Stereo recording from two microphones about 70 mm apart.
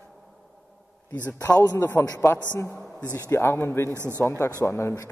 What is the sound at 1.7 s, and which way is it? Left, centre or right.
Speech, left.